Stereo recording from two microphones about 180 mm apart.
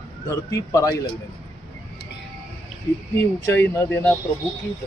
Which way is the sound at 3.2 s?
15° left (ahead or behind).